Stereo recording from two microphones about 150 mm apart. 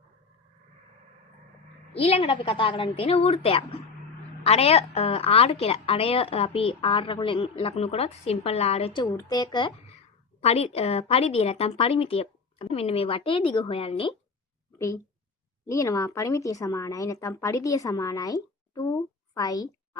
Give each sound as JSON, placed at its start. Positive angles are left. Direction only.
{"t": 2.0, "sound": "a woman's voice", "side_deg": 40}
{"t": 10.4, "sound": "a woman's voice", "side_deg": 40}
{"t": 15.6, "sound": "speech", "side_deg": 20}